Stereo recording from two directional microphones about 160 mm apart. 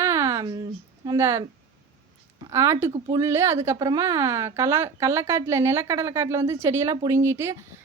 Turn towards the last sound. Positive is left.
turn(degrees=-15)  # may be behind; listen again after turning